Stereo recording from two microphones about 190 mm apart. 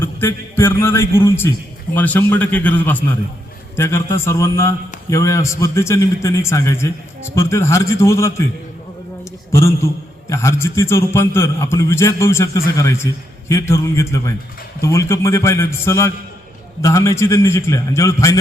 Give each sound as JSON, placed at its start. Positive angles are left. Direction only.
{"t": 0.0, "sound": "a man's voice", "side_deg": 10}
{"t": 9.5, "sound": "a man's voice", "side_deg": 15}